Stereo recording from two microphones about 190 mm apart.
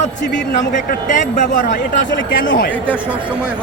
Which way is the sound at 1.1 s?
40° left (ahead or behind).